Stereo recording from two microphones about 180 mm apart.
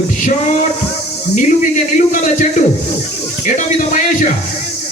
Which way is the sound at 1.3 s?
45° left (ahead or behind).